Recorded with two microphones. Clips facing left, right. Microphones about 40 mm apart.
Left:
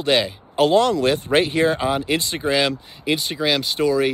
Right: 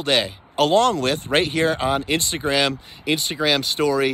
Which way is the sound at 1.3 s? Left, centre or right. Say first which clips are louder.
Even; right.